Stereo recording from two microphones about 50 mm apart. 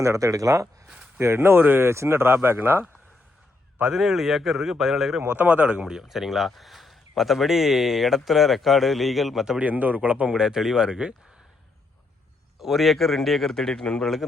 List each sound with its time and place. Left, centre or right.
0.0 s speech: right
1.2 s speech: right
3.9 s speech: centre
5.3 s speech: right
5.9 s speech: centre
9.6 s speech: right; by 11.1 s centre
12.5 s speech: centre